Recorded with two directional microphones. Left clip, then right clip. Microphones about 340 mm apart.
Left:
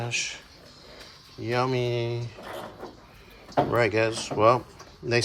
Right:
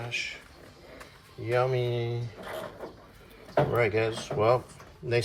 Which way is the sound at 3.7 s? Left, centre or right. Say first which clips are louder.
Left 3 dB; centre.